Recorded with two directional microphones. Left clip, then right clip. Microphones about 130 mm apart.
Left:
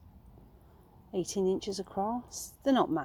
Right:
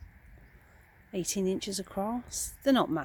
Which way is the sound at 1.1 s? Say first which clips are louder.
Left 1 dB; 45° right (ahead or behind).